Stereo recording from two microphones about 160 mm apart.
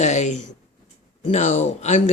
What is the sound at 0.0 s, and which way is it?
Speech, 45° left (ahead or behind).